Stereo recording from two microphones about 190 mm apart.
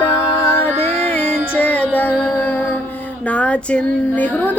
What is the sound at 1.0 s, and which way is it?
Music, 10° left (ahead or behind).